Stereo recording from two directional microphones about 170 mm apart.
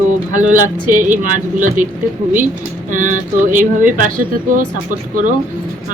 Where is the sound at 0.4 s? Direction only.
50° right (ahead or behind).